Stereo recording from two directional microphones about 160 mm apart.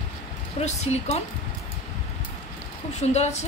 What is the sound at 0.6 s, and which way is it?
Speech, 45° left (ahead or behind).